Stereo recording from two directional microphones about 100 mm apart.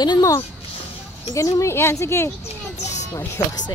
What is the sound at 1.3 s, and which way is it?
A woman's voice, 30° left (ahead or behind).